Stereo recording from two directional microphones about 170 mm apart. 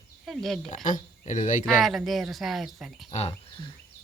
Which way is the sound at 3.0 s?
40° left (ahead or behind).